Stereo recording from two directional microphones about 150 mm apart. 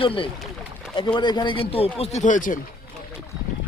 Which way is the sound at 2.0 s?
55° left (ahead or behind).